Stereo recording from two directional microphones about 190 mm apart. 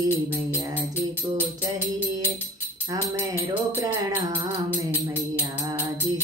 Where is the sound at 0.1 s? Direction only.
10° left (ahead or behind).